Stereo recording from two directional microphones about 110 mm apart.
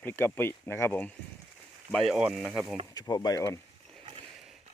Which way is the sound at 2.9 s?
40° left (ahead or behind).